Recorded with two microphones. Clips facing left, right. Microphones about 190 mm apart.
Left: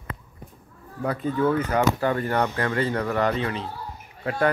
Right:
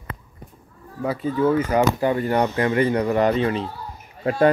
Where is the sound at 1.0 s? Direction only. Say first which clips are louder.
Right 3 dB; 5° right (ahead or behind).